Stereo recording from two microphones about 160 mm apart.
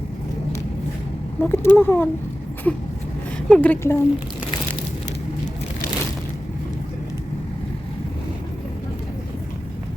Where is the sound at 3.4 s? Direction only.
5° left (ahead or behind).